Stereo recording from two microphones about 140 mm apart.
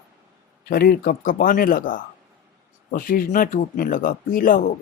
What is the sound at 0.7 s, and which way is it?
Speech, 90° left.